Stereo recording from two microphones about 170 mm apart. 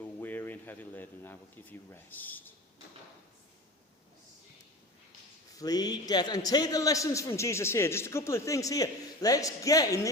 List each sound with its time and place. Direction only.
0.0 s speech: 10° left (ahead or behind)
5.5 s a man's voice: 25° left (ahead or behind)